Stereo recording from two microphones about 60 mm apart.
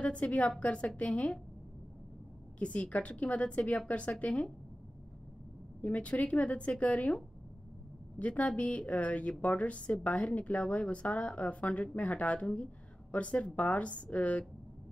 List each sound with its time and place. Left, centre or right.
0.0 s speech: left
2.6 s speech: left
5.8 s speech: left
8.2 s speech: left